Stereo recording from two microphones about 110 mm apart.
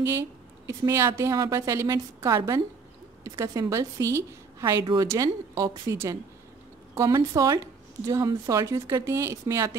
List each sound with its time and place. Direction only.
0.0 s a woman's voice: 25° right (ahead or behind)